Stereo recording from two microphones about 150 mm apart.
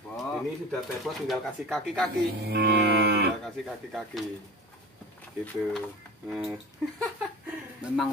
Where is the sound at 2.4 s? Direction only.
90° right.